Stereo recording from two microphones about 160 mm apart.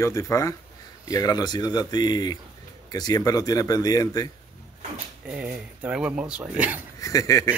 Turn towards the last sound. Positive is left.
turn(degrees=20)  # may be behind; listen again after turning